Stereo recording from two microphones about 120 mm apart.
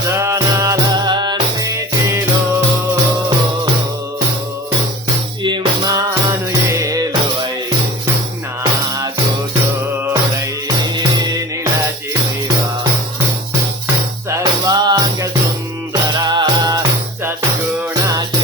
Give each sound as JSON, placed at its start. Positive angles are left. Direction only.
{"t": 0.1, "sound": "music", "side_deg": -25}
{"t": 5.4, "sound": "music", "side_deg": -40}
{"t": 14.3, "sound": "music", "side_deg": -25}